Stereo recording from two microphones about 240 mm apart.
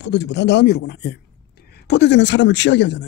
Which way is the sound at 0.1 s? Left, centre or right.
Left.